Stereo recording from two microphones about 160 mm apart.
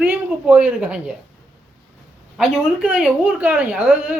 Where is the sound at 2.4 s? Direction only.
5° right (ahead or behind).